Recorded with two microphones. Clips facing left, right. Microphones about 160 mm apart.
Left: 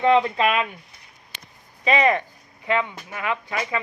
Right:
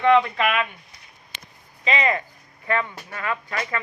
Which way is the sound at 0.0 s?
30° left (ahead or behind).